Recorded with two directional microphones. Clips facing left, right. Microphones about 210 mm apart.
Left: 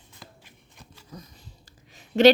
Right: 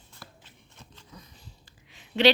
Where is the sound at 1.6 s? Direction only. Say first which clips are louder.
Left 3 dB; 45° left (ahead or behind).